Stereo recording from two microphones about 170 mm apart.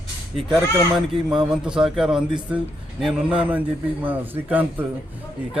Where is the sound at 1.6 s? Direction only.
5° right (ahead or behind).